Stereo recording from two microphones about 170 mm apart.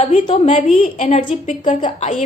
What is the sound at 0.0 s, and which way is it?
A woman's voice, 40° left (ahead or behind).